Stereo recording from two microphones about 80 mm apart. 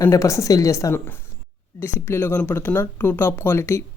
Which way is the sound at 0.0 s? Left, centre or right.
Left.